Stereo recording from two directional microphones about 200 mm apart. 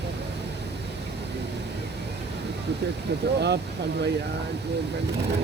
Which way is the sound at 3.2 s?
55° right (ahead or behind).